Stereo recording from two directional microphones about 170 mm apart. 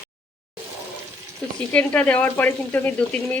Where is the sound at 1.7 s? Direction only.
5° left (ahead or behind).